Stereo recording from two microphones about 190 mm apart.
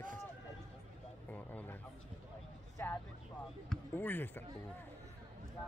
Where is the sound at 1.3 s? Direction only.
10° left (ahead or behind).